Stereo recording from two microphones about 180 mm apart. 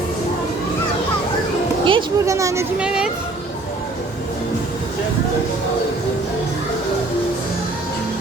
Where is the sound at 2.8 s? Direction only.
5° right (ahead or behind).